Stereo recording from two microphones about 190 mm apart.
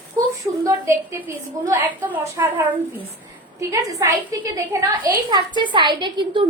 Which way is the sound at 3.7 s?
15° right (ahead or behind).